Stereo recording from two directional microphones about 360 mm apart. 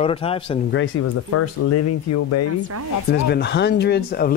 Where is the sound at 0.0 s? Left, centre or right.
Centre.